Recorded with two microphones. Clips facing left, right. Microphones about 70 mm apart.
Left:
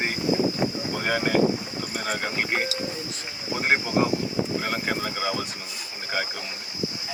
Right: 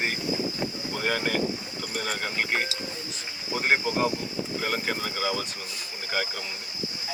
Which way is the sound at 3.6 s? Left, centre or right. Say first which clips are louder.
Left 2 dB; centre.